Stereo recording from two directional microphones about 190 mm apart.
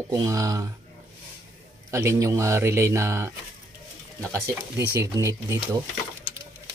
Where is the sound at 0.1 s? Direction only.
20° right (ahead or behind).